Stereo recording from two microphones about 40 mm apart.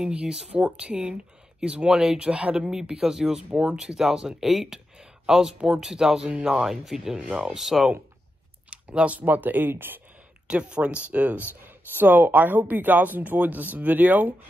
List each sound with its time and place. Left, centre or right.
0.0 s speech: right
0.9 s speech: right
1.9 s speech: centre
2.6 s speech: centre
3.4 s speech: right
3.7 s speech: centre
7.2 s speech: right
7.5 s speech: centre
8.6 s clicking: right
9.2 s speech: right
10.5 s speech: right
12.0 s speech: right